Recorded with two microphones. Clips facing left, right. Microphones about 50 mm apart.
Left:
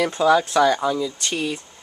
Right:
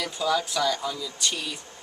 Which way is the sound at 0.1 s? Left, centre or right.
Left.